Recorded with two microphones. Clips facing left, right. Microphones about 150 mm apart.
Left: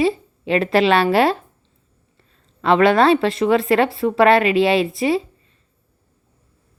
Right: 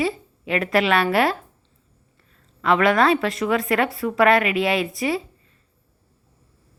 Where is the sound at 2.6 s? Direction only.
30° left (ahead or behind).